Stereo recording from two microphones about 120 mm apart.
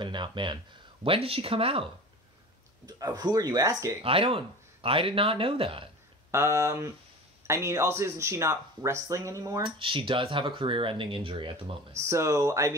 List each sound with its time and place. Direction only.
0.0 s speech: 40° right (ahead or behind)
2.9 s speech: 30° right (ahead or behind)
4.0 s speech: 50° right (ahead or behind)
6.3 s speech: 25° right (ahead or behind)
9.6 s speech: 45° right (ahead or behind)
12.0 s speech: 25° right (ahead or behind)